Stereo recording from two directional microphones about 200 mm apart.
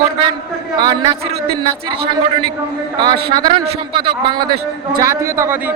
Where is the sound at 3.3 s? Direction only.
25° right (ahead or behind).